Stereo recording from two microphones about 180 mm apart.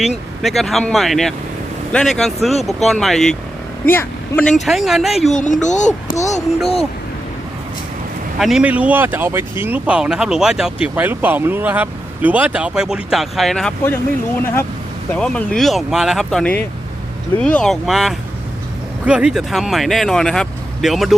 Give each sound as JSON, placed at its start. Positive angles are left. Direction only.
{"t": 0.4, "sound": "speech", "side_deg": 0}
{"t": 5.3, "sound": "speech", "side_deg": 45}
{"t": 8.4, "sound": "speech", "side_deg": 0}
{"t": 15.1, "sound": "speech", "side_deg": 5}